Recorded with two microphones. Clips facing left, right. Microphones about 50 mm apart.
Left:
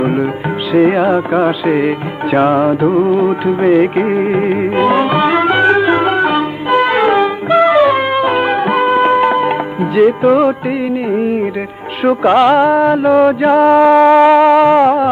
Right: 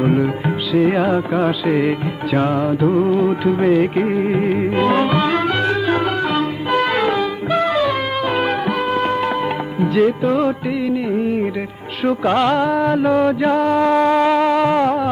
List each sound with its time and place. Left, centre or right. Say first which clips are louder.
0.0 s music: left 2 dB; centre
0.7 s music: left 6 dB; left
0.9 s music: left 5 dB; centre
2.8 s music: left 4 dB; centre
4.8 s music: left 5 dB; centre
6.7 s music: left 7 dB; centre